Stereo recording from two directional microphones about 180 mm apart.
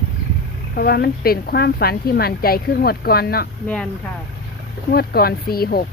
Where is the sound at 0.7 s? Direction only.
60° left (ahead or behind).